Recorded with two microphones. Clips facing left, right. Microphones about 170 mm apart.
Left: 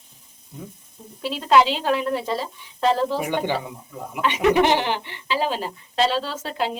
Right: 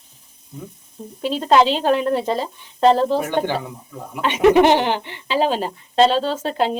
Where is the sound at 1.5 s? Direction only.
20° right (ahead or behind).